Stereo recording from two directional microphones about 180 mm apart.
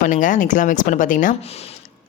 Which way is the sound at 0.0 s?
45° left (ahead or behind).